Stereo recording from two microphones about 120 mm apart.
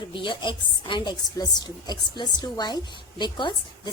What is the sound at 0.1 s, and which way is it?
A woman's voice, 40° left (ahead or behind).